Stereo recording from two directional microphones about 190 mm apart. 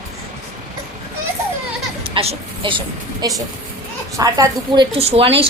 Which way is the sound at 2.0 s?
25° right (ahead or behind).